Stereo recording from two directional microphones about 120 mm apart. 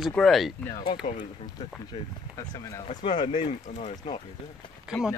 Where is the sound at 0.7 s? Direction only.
40° left (ahead or behind).